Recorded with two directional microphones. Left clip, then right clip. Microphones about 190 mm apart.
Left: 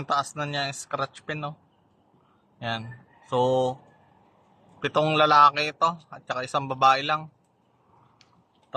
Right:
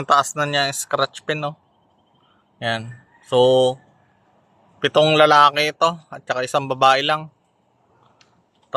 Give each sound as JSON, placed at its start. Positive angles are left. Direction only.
{"t": 0.0, "sound": "a man's voice", "side_deg": -50}
{"t": 2.6, "sound": "a man's voice", "side_deg": -50}
{"t": 4.8, "sound": "a man's voice", "side_deg": -45}